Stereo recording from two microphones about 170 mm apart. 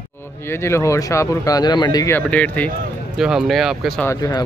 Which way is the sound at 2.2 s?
10° left (ahead or behind).